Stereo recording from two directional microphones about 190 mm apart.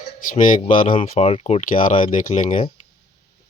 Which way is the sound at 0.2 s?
45° left (ahead or behind).